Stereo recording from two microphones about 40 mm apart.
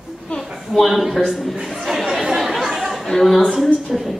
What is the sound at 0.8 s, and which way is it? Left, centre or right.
Speech, centre.